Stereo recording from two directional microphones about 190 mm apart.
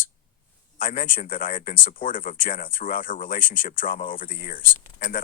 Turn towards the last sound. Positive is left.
turn(degrees=45)  # may be behind; listen again after turning